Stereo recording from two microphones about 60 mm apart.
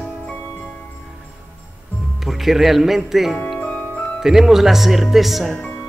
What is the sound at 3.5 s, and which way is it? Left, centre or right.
Music, left.